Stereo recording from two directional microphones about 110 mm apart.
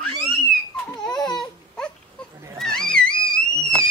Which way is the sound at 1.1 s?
40° left (ahead or behind).